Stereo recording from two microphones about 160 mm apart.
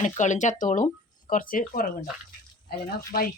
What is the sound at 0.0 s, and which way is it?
Speech, 50° left (ahead or behind).